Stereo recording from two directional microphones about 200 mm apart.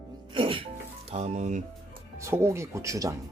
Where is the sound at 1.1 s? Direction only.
35° right (ahead or behind).